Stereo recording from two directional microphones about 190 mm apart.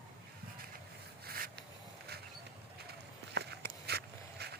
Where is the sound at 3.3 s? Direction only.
60° right (ahead or behind).